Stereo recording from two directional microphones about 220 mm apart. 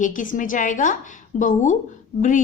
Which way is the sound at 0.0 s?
35° left (ahead or behind).